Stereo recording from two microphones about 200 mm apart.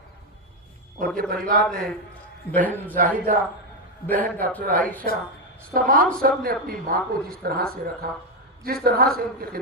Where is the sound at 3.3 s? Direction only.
45° right (ahead or behind).